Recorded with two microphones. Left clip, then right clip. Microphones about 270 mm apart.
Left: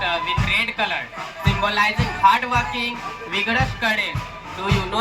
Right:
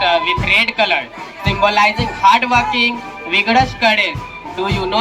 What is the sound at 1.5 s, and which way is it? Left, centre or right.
Music, right.